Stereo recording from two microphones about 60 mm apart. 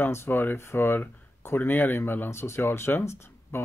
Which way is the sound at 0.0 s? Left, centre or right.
Left.